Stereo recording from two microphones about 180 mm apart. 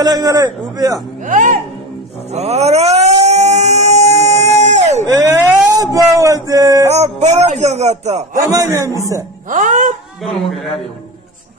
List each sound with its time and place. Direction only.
0.0 s a man's voice: 20° right (ahead or behind)
1.2 s speech: 45° right (ahead or behind)
2.3 s a sound: 35° right (ahead or behind)
5.0 s vehicle: 20° right (ahead or behind)
6.1 s male singing: 15° right (ahead or behind)
6.9 s speech: 35° right (ahead or behind)
8.5 s a man's voice: 20° right (ahead or behind)
9.5 s speech: 45° right (ahead or behind)